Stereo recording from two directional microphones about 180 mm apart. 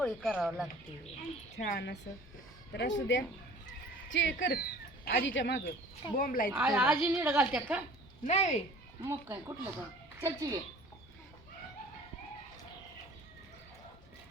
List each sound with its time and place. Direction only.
0.0 s speech: centre (ahead or behind)
1.2 s speech: 60° left (ahead or behind); by 5.6 s 85° left
6.1 s a woman's voice: 50° left (ahead or behind)
6.5 s a woman's voice: 10° right (ahead or behind)
8.2 s speech: 40° left (ahead or behind)
9.0 s a woman's voice: 15° right (ahead or behind)